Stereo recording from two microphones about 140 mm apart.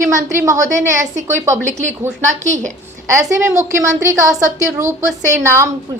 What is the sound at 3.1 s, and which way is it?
A woman's voice, 20° right (ahead or behind).